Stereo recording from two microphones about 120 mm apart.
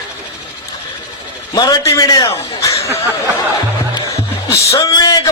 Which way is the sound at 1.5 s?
35° left (ahead or behind).